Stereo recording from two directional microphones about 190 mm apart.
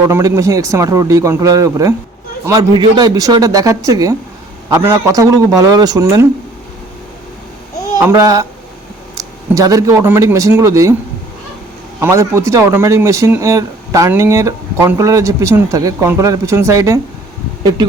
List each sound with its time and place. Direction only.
0.1 s speech: 15° right (ahead or behind)
7.9 s speech: 20° right (ahead or behind)
11.9 s speech: 15° right (ahead or behind)